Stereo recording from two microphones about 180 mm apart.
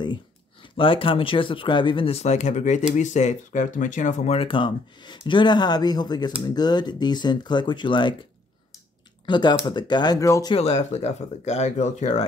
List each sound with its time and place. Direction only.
0.0 s speech: 25° left (ahead or behind)
9.2 s speech: 25° left (ahead or behind)
10.5 s speech: 35° left (ahead or behind)